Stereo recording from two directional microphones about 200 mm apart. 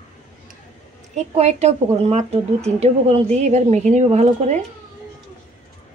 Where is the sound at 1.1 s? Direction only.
30° right (ahead or behind).